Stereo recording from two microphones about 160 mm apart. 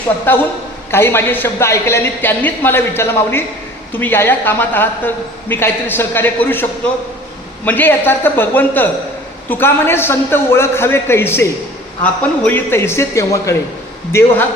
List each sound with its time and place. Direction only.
0.3 s a woman's voice: 10° left (ahead or behind)